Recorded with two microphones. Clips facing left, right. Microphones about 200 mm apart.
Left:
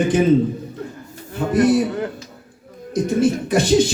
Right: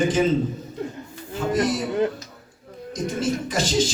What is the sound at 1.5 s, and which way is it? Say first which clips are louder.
Speech: left 7 dB; 60° left (ahead or behind).